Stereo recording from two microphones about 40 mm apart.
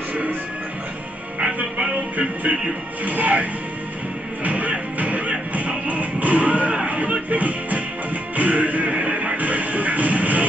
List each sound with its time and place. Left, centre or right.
1.6 s music: right
3.1 s speech: right
4.5 s music: right